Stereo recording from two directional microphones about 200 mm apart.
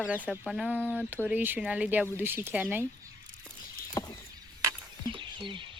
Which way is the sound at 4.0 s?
15° left (ahead or behind).